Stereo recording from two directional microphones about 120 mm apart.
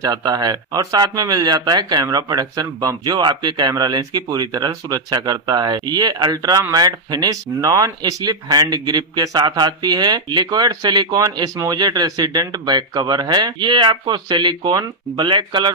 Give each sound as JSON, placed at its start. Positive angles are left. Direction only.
{"t": 0.0, "sound": "speech", "side_deg": -30}